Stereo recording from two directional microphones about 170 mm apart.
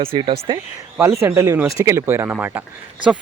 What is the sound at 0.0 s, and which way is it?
Speech, 30° right (ahead or behind).